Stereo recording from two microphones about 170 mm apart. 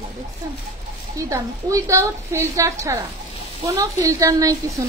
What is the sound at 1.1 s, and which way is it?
A woman's voice, 20° right (ahead or behind).